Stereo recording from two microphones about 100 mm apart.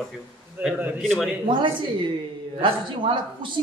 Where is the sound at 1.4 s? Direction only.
55° right (ahead or behind).